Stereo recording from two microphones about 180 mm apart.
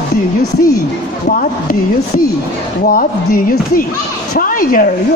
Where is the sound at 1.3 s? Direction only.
50° left (ahead or behind).